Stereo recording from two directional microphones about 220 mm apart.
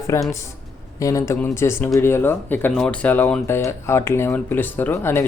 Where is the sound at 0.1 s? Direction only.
15° left (ahead or behind).